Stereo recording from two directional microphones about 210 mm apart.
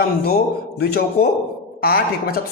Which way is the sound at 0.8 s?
50° left (ahead or behind).